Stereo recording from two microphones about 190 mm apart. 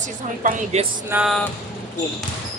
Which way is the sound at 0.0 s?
35° right (ahead or behind).